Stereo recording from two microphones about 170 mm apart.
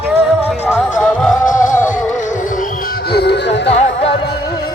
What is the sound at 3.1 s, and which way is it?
Music, 75° left (ahead or behind).